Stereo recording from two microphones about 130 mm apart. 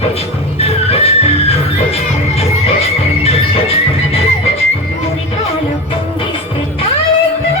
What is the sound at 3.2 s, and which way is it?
Music, 50° left (ahead or behind).